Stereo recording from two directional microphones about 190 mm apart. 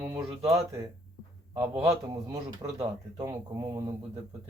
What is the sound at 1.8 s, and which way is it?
Speech, 15° right (ahead or behind).